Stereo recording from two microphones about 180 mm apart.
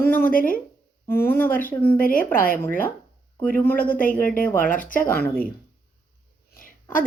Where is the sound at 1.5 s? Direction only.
50° left (ahead or behind).